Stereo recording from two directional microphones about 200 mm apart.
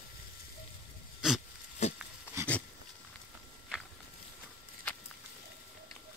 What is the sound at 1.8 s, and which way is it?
Pig, 35° left (ahead or behind).